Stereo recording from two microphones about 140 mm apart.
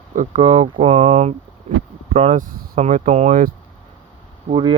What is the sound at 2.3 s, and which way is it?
Speech, 90° right.